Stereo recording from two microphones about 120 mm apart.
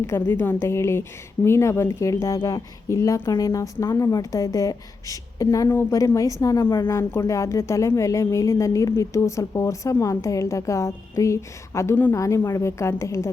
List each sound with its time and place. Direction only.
0.0 s speech: 20° left (ahead or behind)